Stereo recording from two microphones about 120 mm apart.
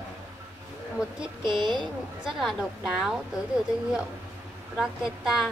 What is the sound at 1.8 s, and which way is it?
Speech, centre (ahead or behind).